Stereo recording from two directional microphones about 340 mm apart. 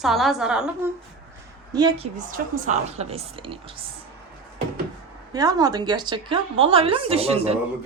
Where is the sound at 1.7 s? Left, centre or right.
Centre.